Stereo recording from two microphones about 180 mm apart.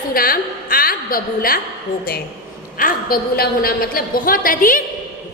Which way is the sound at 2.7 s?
55° left (ahead or behind).